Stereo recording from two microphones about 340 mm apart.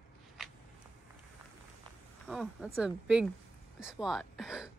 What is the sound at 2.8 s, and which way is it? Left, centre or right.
Speech, centre.